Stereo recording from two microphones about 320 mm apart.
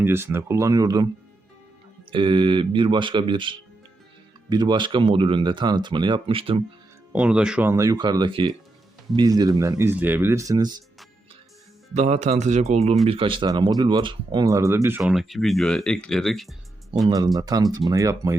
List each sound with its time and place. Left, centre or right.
0.0 s speech: centre
2.0 s speech: centre
7.1 s speech: centre
11.9 s speech: centre
17.1 s speech: centre